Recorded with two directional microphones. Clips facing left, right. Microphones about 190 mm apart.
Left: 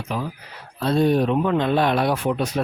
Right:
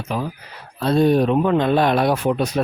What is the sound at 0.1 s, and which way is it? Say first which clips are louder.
Speech: right 3 dB; 40° right (ahead or behind).